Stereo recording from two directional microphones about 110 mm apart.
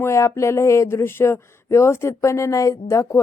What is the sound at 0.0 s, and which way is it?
Speech, 25° left (ahead or behind).